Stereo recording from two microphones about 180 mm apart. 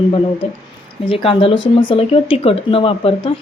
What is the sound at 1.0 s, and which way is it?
Speech, 30° left (ahead or behind).